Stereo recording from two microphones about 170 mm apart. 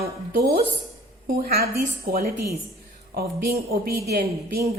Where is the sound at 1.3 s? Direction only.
65° right (ahead or behind).